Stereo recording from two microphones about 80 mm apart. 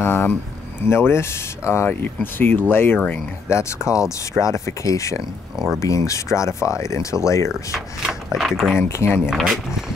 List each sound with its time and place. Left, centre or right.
0.0 s a sound: left
0.8 s speech: left
3.4 s speech: left
8.4 s speech: centre
8.7 s speech: left
9.3 s speech: centre